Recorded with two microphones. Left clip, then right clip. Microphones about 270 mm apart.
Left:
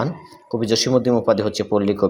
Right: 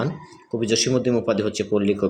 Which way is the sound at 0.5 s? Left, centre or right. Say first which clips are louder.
Left 3 dB; centre.